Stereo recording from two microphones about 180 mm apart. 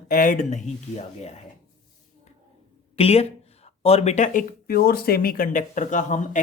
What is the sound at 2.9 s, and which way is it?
Speech, 35° left (ahead or behind).